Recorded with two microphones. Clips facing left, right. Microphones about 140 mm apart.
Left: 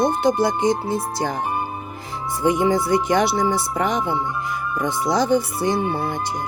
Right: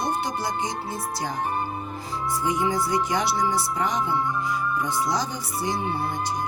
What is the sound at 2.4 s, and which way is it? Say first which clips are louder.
Speech: left 8 dB; 60° left (ahead or behind).